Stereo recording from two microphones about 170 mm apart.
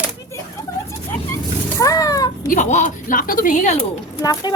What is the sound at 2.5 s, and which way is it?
Speech, 45° left (ahead or behind).